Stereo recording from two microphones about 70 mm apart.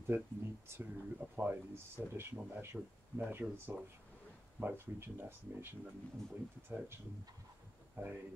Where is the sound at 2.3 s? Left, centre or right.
Right.